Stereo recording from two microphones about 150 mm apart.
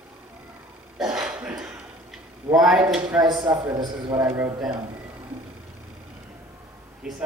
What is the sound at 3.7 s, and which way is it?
Speech, 20° right (ahead or behind).